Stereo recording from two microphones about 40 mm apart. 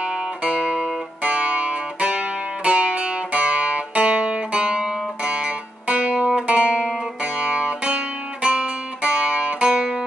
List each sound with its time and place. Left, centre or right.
0.0 s music: right
6.4 s music: right